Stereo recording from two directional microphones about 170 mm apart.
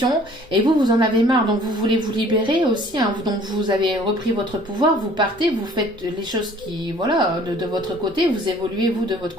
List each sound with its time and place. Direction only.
0.0 s a woman's voice: 25° right (ahead or behind)
7.0 s a woman's voice: 25° right (ahead or behind)